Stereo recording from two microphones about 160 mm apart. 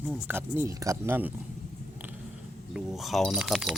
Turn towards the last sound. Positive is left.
turn(degrees=0)  # may be behind; listen again after turning